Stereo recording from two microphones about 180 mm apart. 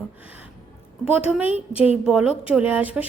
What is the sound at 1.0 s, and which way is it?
A woman's voice, 10° right (ahead or behind).